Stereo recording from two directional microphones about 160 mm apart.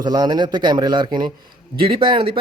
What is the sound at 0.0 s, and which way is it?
A man's voice, 25° right (ahead or behind).